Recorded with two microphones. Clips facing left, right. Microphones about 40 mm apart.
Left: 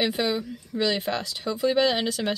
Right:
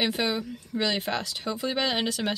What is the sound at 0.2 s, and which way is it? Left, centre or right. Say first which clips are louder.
Speech: left 2 dB; centre.